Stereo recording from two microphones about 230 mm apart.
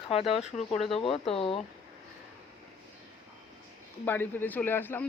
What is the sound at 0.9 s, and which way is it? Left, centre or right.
Speech, left.